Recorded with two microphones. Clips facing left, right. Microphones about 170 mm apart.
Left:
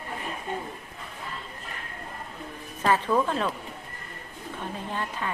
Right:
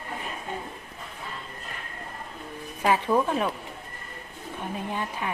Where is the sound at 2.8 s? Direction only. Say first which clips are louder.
Right 1 dB; 15° right (ahead or behind).